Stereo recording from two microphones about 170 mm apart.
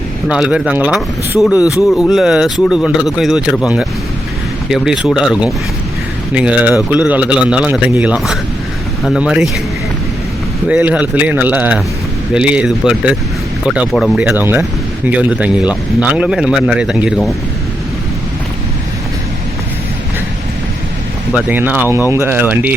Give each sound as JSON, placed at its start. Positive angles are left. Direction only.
{"t": 0.3, "sound": "speech", "side_deg": -5}
{"t": 1.5, "sound": "speech", "side_deg": 20}
{"t": 2.0, "sound": "speech", "side_deg": 0}
{"t": 10.7, "sound": "speech", "side_deg": -10}
{"t": 21.3, "sound": "speech", "side_deg": -10}